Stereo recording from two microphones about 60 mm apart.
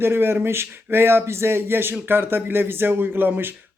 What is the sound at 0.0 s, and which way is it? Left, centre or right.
Speech, right.